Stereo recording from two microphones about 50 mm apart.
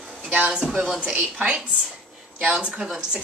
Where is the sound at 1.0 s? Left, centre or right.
Right.